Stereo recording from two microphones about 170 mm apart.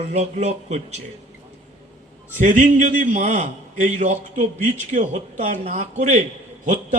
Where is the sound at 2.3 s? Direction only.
45° right (ahead or behind).